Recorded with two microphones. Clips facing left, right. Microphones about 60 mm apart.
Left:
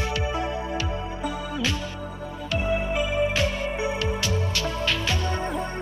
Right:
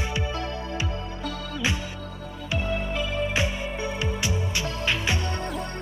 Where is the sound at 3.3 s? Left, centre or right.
Centre.